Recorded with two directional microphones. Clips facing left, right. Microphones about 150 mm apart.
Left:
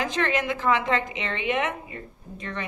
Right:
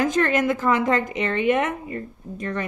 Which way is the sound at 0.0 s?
45° right (ahead or behind).